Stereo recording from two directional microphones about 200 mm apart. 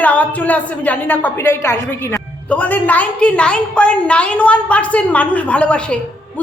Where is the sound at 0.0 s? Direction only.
5° left (ahead or behind).